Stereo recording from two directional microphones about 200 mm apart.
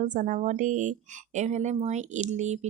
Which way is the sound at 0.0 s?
40° right (ahead or behind).